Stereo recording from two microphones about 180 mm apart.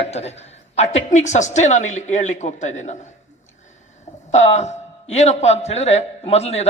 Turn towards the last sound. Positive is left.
turn(degrees=35)  # may be behind; listen again after turning